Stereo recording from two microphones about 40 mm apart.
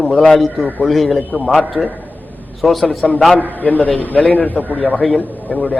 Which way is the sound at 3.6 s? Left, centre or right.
Left.